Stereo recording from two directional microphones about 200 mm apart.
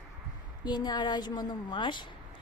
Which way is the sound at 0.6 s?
20° left (ahead or behind).